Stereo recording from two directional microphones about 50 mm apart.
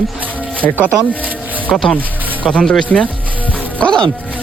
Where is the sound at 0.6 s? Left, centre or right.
Left.